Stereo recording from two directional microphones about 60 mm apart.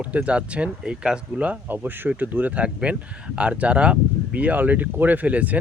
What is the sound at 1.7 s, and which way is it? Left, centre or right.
Speech, right.